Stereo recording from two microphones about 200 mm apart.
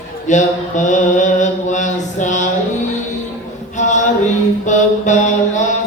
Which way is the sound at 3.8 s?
35° left (ahead or behind).